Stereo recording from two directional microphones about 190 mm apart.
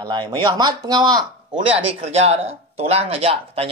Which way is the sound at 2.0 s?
35° right (ahead or behind).